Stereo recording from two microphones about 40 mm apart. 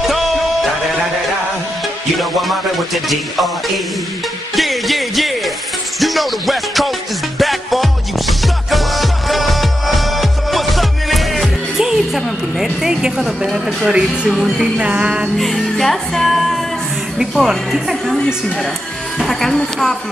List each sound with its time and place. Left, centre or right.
0.0 s music: centre
2.1 s music: centre
13.5 s music: centre
13.8 s speech: right
15.3 s music: centre
17.5 s a woman's voice: centre
19.1 s speech: centre